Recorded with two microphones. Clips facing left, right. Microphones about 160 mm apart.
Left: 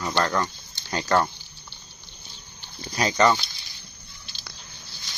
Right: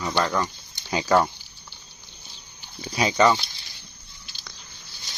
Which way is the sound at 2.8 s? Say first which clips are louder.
Right 1 dB; 5° right (ahead or behind).